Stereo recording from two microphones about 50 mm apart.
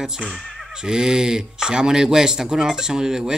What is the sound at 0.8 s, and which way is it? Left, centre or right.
Speech, centre.